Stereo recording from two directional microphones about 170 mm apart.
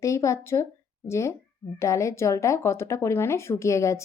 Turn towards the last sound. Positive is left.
turn(degrees=15)  # may be behind; listen again after turning